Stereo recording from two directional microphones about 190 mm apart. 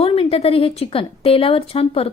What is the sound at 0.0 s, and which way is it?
A woman's voice, 30° left (ahead or behind).